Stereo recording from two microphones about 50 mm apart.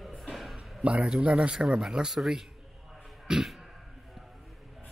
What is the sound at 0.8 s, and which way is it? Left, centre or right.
A man's voice, right.